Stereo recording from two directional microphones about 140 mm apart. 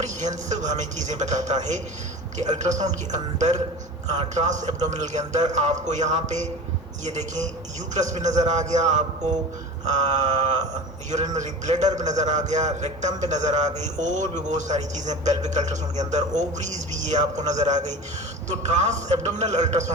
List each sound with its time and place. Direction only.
0.0 s a man's voice: 55° right (ahead or behind)
9.8 s a sound: 55° right (ahead or behind)
11.1 s a man's voice: 55° right (ahead or behind)